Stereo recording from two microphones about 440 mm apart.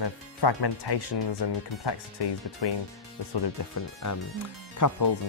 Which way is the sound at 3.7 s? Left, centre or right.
Left.